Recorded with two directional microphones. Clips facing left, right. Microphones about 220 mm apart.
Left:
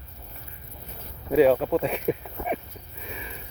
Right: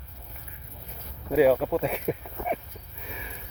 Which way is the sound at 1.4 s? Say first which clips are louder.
Left 2 dB; 5° right (ahead or behind).